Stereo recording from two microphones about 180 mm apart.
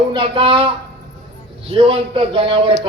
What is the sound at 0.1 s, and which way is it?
Speech, 30° right (ahead or behind).